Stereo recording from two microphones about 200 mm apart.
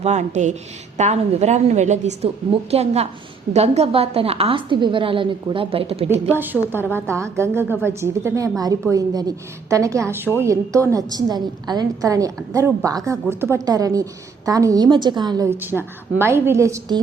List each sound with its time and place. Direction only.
0.0 s a woman's voice: 35° right (ahead or behind)
6.3 s a woman's voice: 10° right (ahead or behind)